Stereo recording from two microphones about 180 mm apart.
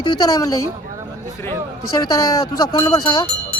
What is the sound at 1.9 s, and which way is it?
Speech, 20° left (ahead or behind).